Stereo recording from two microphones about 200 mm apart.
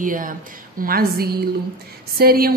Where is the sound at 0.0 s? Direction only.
40° right (ahead or behind).